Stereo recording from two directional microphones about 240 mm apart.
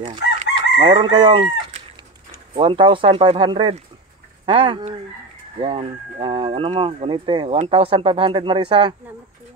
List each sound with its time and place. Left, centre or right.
0.0 s chicken: right
2.5 s speech: right